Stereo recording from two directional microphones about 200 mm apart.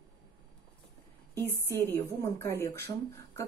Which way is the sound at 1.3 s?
10° left (ahead or behind).